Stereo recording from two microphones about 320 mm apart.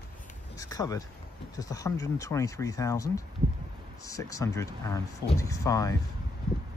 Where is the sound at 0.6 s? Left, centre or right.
Centre.